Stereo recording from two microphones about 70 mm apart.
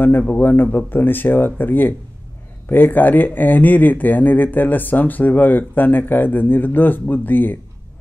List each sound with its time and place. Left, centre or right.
0.4 s speech: left